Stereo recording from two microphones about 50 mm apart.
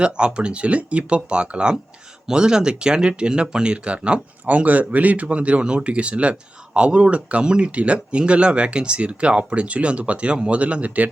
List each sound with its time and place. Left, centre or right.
0.0 s speech: right